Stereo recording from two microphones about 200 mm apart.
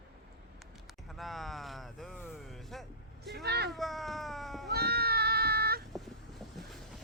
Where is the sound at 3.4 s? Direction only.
55° right (ahead or behind).